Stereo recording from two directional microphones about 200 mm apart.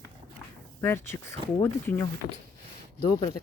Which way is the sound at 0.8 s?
10° left (ahead or behind).